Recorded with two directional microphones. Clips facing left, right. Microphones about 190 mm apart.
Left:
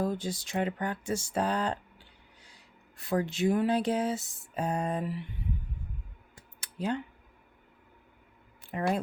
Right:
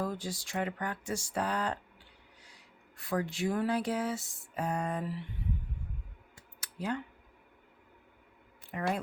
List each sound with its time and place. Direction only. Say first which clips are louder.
0.0 s music: left 4 dB; 25° left (ahead or behind)
3.0 s music: left 4 dB; 25° left (ahead or behind)
6.6 s a sound: left 3 dB; 25° left (ahead or behind)
8.7 s music: left 4 dB; 30° left (ahead or behind)